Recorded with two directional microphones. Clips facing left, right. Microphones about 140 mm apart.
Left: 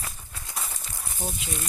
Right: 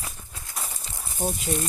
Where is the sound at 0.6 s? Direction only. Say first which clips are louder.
Right 1 dB; 20° right (ahead or behind).